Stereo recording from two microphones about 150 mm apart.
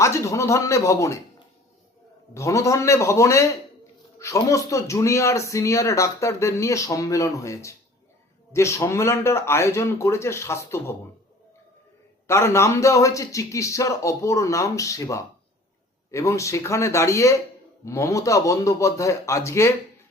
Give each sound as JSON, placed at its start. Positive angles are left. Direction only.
{"t": 0.0, "sound": "speech", "side_deg": 20}
{"t": 2.3, "sound": "speech", "side_deg": 20}
{"t": 12.3, "sound": "speech", "side_deg": 20}